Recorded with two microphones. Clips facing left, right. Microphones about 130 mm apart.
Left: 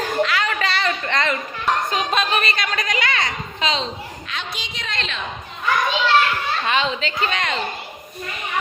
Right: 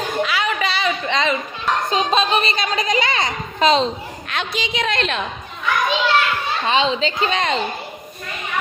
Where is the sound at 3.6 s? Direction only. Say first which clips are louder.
Right 8 dB; 45° right (ahead or behind).